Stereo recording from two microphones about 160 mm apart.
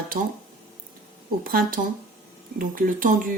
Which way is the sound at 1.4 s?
65° right (ahead or behind).